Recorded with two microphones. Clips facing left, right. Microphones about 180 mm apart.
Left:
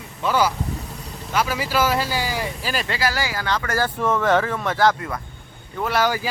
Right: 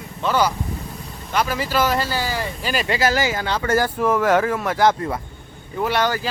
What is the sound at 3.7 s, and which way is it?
Speech, 10° right (ahead or behind).